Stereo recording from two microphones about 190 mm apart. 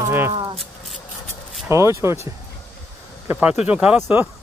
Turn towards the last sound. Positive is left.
turn(degrees=-5)  # may be behind; listen again after turning